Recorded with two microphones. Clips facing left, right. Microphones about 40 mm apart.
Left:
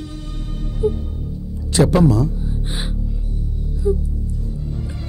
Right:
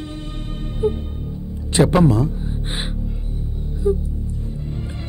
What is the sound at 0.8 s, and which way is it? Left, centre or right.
Music, right.